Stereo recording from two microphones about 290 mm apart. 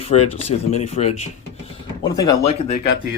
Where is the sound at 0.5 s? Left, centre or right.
Left.